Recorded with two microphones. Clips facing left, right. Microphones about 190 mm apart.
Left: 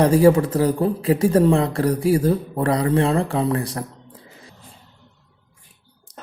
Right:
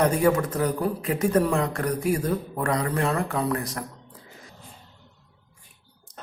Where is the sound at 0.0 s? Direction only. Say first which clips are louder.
Left 7 dB; 30° left (ahead or behind).